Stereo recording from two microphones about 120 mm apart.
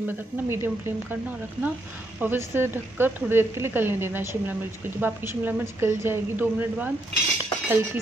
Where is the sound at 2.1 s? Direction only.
15° right (ahead or behind).